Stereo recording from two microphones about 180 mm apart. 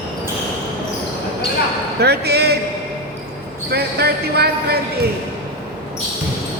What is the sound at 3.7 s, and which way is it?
Basketball bounce, 60° right (ahead or behind).